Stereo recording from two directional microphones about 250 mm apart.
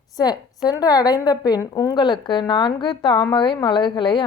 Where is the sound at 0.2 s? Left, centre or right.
Centre.